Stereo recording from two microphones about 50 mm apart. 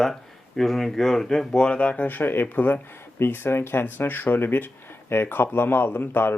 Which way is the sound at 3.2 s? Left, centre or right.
Left.